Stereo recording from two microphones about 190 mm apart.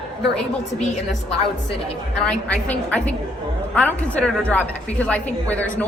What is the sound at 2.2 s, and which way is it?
A woman's voice, 5° left (ahead or behind).